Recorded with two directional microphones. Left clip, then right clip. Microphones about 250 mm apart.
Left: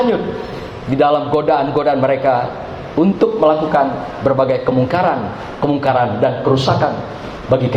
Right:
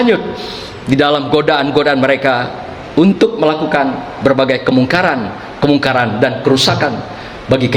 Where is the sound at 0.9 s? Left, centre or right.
Right.